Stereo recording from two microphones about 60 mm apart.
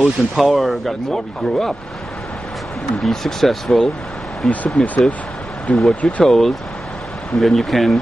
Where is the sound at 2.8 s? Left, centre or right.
Centre.